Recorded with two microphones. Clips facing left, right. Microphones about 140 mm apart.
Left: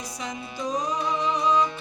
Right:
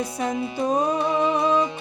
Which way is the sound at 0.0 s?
55° right (ahead or behind).